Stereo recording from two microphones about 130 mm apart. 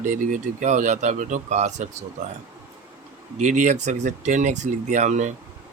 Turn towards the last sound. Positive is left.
turn(degrees=-65)  # may be behind; listen again after turning